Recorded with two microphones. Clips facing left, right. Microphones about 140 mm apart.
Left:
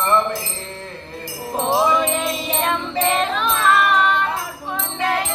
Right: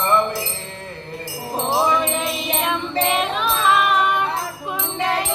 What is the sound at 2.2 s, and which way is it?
Music, 10° right (ahead or behind).